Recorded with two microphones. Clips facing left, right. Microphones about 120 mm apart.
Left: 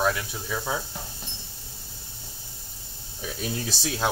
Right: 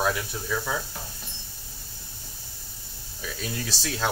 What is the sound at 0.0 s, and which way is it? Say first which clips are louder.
Speech: left 1 dB; 5° right (ahead or behind).